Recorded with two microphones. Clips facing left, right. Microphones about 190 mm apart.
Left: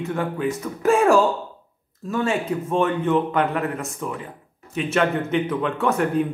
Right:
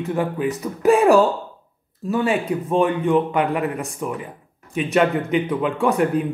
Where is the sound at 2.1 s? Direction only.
15° right (ahead or behind).